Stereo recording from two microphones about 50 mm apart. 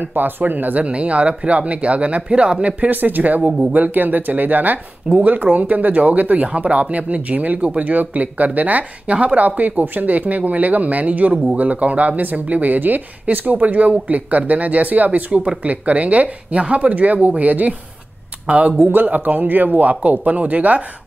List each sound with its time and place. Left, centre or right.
0.0 s speech: right
0.8 s speech: right
3.0 s speech: right
18.8 s speech: right